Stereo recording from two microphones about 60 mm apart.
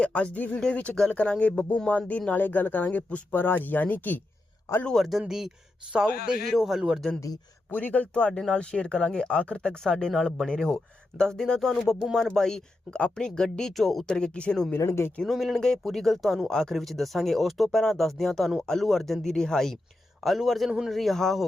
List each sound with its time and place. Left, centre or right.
0.0 s speech: centre
4.9 s a man's voice: centre
7.7 s speech: left
8.3 s a man's voice: centre
14.8 s speech: left
15.2 s a man's voice: centre
20.2 s a man's voice: centre
20.9 s a man's voice: centre